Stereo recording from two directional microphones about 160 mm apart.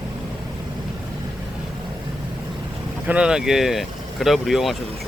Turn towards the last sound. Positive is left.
turn(degrees=0)  # may be behind; listen again after turning